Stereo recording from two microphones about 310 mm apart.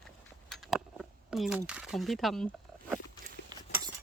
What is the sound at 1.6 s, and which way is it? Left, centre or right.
Speech, centre.